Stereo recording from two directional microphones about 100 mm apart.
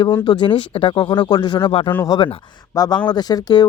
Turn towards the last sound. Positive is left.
turn(degrees=40)  # may be behind; listen again after turning